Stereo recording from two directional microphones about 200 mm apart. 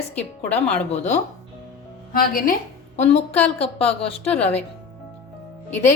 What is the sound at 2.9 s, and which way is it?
Speech, 35° left (ahead or behind).